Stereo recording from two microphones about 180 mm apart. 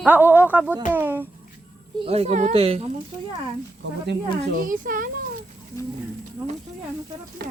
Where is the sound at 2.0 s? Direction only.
35° right (ahead or behind).